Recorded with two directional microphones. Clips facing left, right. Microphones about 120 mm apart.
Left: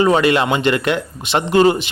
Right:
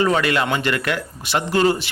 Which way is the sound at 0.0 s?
20° left (ahead or behind).